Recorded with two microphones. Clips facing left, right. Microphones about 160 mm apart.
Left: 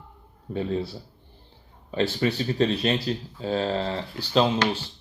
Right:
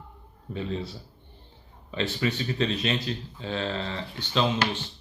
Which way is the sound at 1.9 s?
40° left (ahead or behind).